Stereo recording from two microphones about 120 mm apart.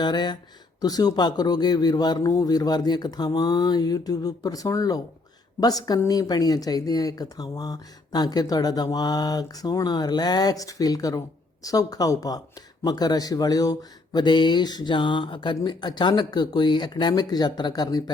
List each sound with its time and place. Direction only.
0.0 s speech: 35° left (ahead or behind)